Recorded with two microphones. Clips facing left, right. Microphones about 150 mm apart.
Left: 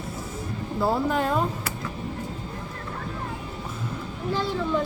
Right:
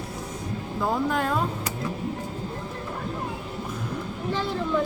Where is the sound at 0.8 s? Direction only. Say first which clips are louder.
Left 2 dB; 10° left (ahead or behind).